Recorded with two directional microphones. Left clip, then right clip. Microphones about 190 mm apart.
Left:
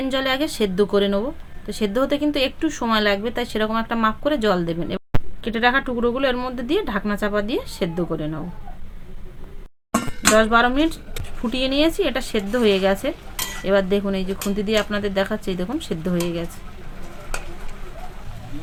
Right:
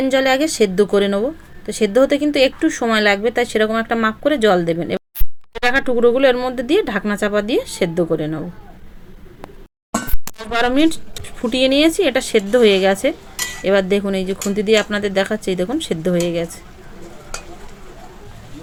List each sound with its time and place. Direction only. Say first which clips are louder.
0.0 s speech: right 6 dB; 20° right (ahead or behind)
10.5 s speech: right 1 dB; 30° right (ahead or behind)